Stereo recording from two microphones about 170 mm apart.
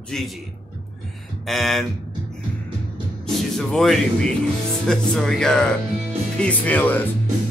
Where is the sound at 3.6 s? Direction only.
Centre (ahead or behind).